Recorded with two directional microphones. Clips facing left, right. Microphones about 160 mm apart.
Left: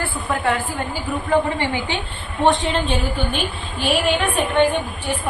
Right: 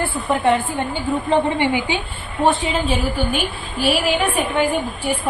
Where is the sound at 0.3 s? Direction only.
20° right (ahead or behind).